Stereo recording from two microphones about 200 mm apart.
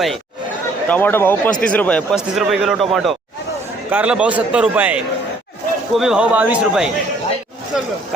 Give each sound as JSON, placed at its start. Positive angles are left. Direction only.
{"t": 0.9, "sound": "a man's voice", "side_deg": 10}